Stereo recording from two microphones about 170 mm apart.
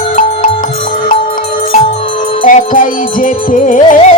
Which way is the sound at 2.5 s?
50° left (ahead or behind).